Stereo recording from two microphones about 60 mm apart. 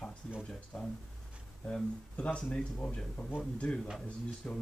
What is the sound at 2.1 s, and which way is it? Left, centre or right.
Speech, left.